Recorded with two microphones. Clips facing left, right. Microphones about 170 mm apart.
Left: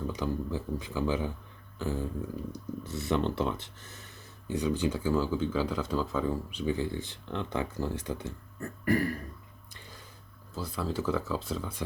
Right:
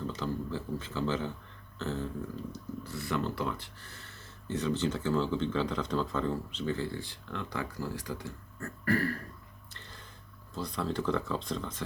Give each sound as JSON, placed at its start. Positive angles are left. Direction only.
{"t": 0.1, "sound": "speech", "side_deg": 15}
{"t": 9.7, "sound": "a sound", "side_deg": 10}
{"t": 10.5, "sound": "speech", "side_deg": 5}